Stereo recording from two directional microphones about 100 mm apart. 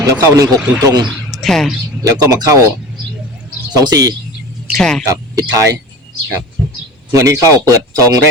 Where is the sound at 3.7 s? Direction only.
40° right (ahead or behind).